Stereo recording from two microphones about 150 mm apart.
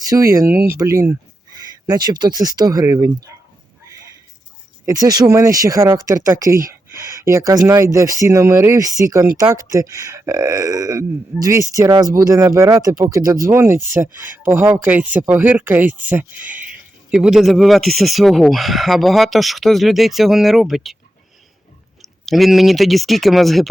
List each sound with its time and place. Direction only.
0.0 s speech: 20° right (ahead or behind)
4.9 s speech: 25° right (ahead or behind); by 20.9 s centre (ahead or behind)
22.0 s speech: centre (ahead or behind)